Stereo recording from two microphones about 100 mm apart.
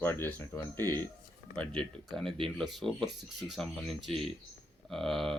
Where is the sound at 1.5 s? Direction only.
10° left (ahead or behind).